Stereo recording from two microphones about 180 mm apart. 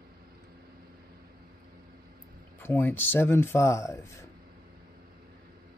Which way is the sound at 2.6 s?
10° left (ahead or behind).